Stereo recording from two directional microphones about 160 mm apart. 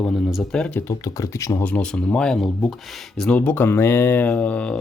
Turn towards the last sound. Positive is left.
turn(degrees=10)  # may be behind; listen again after turning